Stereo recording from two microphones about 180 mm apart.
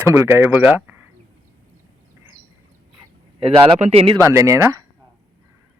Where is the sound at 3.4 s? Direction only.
30° right (ahead or behind).